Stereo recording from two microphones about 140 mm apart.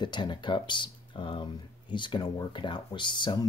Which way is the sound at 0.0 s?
35° left (ahead or behind).